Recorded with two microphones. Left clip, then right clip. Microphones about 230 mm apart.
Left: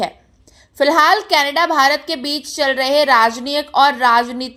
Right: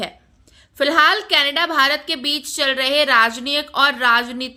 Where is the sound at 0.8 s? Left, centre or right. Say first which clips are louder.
Left 3 dB; centre.